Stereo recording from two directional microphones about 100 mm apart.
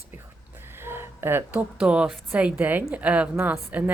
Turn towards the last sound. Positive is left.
turn(degrees=-15)  # may be behind; listen again after turning